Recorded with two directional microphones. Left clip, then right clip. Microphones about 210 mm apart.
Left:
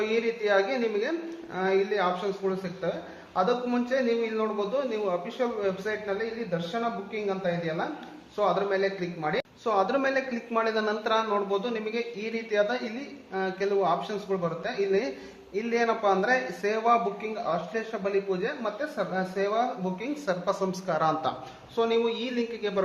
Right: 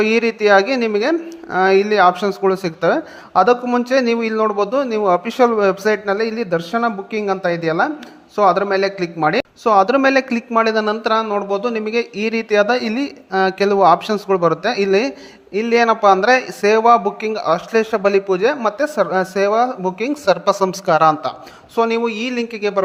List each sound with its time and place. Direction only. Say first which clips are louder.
0.0 s a man's voice: right 12 dB; 40° right (ahead or behind)